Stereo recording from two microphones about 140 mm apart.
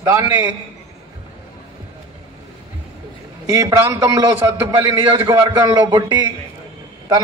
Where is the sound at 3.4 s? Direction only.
25° right (ahead or behind).